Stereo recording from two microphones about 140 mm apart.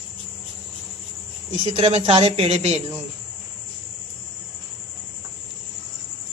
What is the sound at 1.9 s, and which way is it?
Speech, 45° right (ahead or behind).